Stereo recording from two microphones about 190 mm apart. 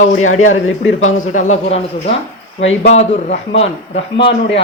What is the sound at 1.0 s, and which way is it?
Speech, 40° left (ahead or behind).